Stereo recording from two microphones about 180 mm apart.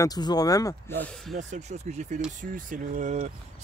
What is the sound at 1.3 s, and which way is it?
Speech, 40° right (ahead or behind).